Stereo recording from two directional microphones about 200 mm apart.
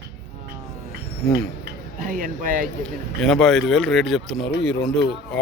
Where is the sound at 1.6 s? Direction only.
45° right (ahead or behind).